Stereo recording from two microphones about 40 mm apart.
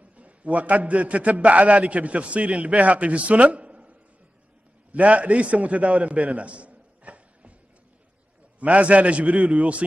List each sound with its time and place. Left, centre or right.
0.1 s a man's voice: right
4.9 s a man's voice: right
8.5 s a man's voice: right